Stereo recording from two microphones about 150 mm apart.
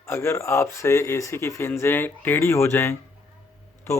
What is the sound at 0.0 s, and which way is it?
Speech, 15° left (ahead or behind).